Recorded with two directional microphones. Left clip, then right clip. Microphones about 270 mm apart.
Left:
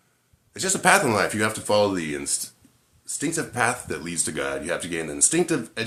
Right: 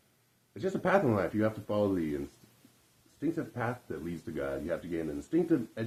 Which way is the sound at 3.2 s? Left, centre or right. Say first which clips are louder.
Left 10 dB; centre.